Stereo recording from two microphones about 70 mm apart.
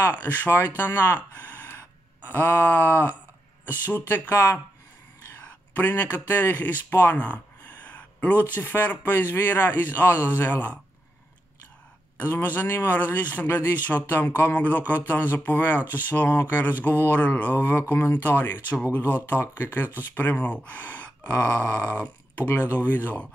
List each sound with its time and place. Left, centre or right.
0.0 s speech: left
2.2 s speech: left
5.8 s speech: left
12.2 s speech: left